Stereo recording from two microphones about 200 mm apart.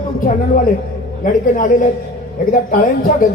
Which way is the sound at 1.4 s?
40° left (ahead or behind).